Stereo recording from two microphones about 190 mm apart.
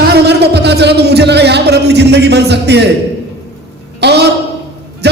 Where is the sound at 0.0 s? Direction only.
55° right (ahead or behind).